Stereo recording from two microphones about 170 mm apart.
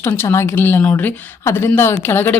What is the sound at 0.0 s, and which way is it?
Speech, 15° left (ahead or behind).